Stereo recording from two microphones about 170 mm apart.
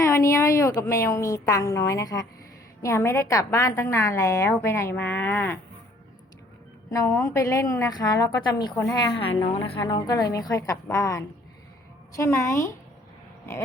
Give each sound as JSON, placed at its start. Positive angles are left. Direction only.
{"t": 0.0, "sound": "a woman's voice", "side_deg": 15}
{"t": 7.1, "sound": "a woman's voice", "side_deg": 15}